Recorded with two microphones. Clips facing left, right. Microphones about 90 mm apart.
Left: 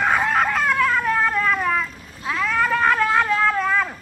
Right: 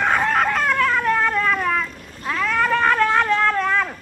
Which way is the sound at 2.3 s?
Centre (ahead or behind).